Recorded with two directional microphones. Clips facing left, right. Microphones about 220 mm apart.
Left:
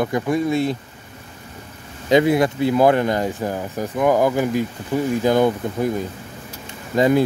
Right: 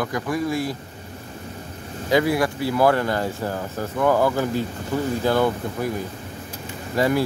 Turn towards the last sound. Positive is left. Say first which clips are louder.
# left 4 dB
turn(degrees=20)  # may be behind; listen again after turning